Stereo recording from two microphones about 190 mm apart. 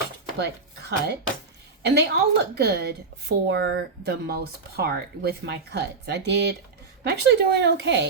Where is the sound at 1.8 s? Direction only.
65° right (ahead or behind).